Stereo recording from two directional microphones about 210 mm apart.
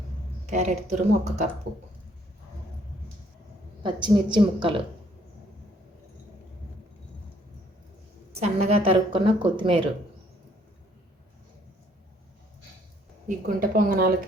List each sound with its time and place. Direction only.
0.4 s speech: 35° right (ahead or behind)
3.8 s a woman's voice: 20° right (ahead or behind)
8.4 s a woman's voice: 30° right (ahead or behind)
13.2 s a woman's voice: 40° right (ahead or behind)